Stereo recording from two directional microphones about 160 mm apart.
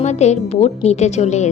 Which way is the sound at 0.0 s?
45° left (ahead or behind).